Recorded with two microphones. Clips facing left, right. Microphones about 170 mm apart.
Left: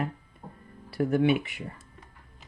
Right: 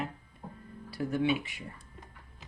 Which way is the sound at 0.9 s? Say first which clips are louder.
Left 6 dB; 60° left (ahead or behind).